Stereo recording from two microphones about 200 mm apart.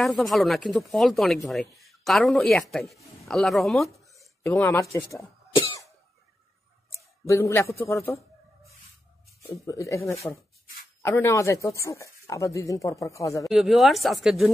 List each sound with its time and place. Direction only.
0.0 s speech: centre (ahead or behind)
5.5 s cough: 25° left (ahead or behind)
7.2 s speech: 15° left (ahead or behind)
9.7 s speech: 15° left (ahead or behind)
13.4 s speech: centre (ahead or behind)